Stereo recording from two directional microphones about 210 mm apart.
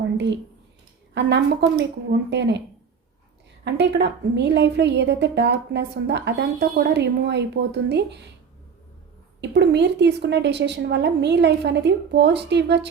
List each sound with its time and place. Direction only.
1.1 s a woman's voice: 55° right (ahead or behind)
3.6 s a woman's voice: 55° right (ahead or behind)
9.4 s a woman's voice: 55° right (ahead or behind)